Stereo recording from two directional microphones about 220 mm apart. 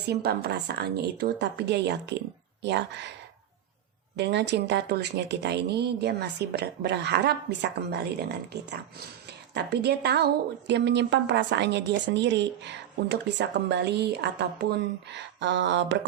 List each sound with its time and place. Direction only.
0.1 s a woman's voice: 45° right (ahead or behind)
4.2 s a woman's voice: 50° right (ahead or behind)